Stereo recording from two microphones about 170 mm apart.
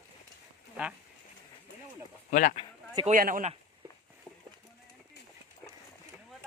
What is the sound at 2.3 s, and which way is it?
Speech, 50° left (ahead or behind).